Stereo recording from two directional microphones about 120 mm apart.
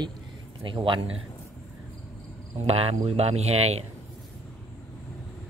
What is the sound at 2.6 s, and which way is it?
Speech, 55° right (ahead or behind).